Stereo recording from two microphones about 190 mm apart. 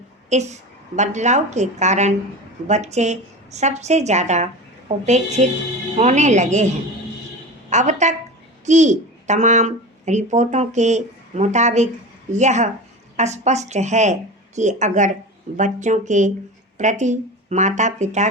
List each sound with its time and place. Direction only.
0.3 s speech: 35° right (ahead or behind)
7.7 s a woman's voice: 40° right (ahead or behind)